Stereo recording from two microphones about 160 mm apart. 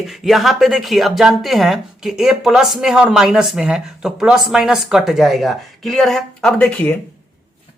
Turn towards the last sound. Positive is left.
turn(degrees=5)  # may be behind; listen again after turning